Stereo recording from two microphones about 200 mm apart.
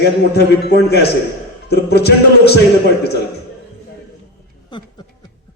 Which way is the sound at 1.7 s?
55° left (ahead or behind).